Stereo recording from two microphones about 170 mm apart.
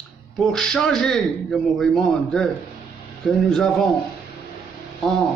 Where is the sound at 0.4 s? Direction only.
5° left (ahead or behind).